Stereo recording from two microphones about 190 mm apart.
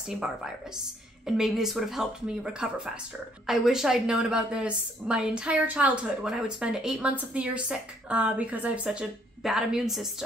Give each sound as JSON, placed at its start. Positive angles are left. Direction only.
{"t": 0.0, "sound": "a woman's voice", "side_deg": -5}